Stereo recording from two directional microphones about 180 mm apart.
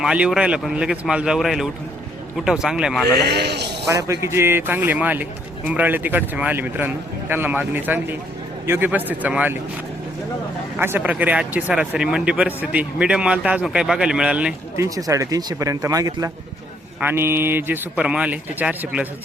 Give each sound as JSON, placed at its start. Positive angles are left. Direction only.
{"t": 0.0, "sound": "speech", "side_deg": -5}
{"t": 3.2, "sound": "a man's voice", "side_deg": -65}
{"t": 3.8, "sound": "speech", "side_deg": -20}
{"t": 10.8, "sound": "speech", "side_deg": -10}
{"t": 14.8, "sound": "speech", "side_deg": -20}